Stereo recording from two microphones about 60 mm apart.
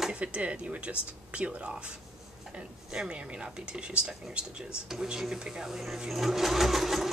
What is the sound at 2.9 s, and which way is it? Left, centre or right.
Speech, centre.